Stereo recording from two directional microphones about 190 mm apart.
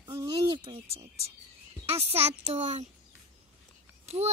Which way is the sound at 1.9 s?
30° right (ahead or behind).